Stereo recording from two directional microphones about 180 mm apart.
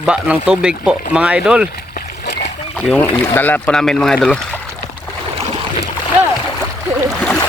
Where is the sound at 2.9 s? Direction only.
10° left (ahead or behind).